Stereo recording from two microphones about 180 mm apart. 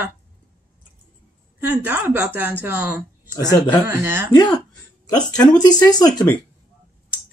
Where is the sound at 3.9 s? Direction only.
15° right (ahead or behind).